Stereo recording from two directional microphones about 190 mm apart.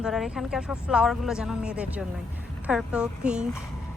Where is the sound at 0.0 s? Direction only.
Centre (ahead or behind).